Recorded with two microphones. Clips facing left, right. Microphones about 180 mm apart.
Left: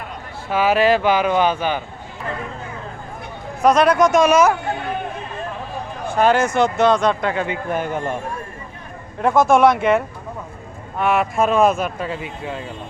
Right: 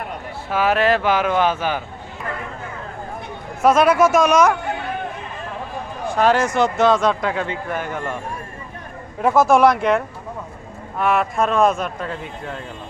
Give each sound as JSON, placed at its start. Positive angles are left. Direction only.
{"t": 0.5, "sound": "speech", "side_deg": 0}
{"t": 3.6, "sound": "speech", "side_deg": -5}
{"t": 6.1, "sound": "speech", "side_deg": 0}
{"t": 7.4, "sound": "speech", "side_deg": 20}
{"t": 9.2, "sound": "speech", "side_deg": 0}